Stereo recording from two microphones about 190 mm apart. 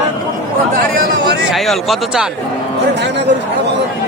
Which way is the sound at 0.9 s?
55° right (ahead or behind).